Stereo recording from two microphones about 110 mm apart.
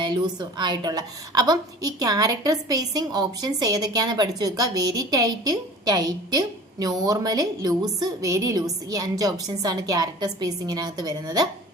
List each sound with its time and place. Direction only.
0.0 s a woman's voice: 40° right (ahead or behind)